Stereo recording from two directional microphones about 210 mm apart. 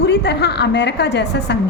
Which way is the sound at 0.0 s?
50° left (ahead or behind).